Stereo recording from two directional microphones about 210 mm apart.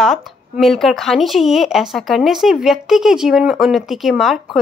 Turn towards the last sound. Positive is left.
turn(degrees=0)  # may be behind; listen again after turning